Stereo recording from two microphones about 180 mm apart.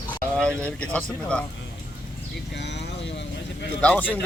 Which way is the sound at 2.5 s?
75° left (ahead or behind).